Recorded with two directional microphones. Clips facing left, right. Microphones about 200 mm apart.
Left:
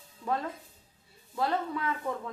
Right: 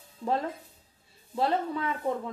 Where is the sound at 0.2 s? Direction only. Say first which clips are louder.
Right 3 dB; 25° right (ahead or behind).